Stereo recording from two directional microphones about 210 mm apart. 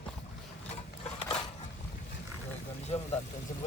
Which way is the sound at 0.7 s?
25° left (ahead or behind).